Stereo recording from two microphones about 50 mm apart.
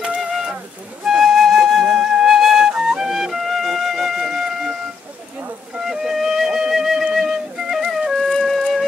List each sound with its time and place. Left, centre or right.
0.0 s music: centre
1.0 s flute: centre
2.8 s music: centre
5.9 s music: centre
8.1 s music: centre